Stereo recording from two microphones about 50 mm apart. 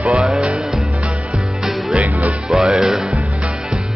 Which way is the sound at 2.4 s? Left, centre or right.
Centre.